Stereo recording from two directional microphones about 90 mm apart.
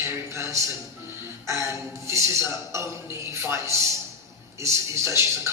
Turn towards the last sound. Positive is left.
turn(degrees=-30)  # may be behind; listen again after turning